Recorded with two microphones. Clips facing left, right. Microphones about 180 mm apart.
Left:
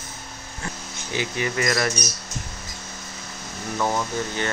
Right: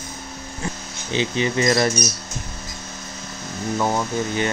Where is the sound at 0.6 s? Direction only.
25° right (ahead or behind).